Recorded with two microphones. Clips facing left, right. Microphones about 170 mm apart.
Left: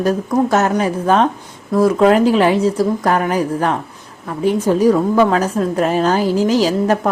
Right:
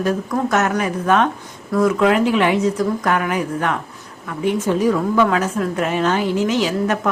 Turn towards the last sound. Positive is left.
turn(degrees=35)  # may be behind; listen again after turning